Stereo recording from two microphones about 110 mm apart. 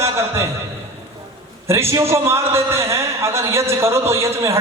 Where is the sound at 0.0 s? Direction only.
25° right (ahead or behind).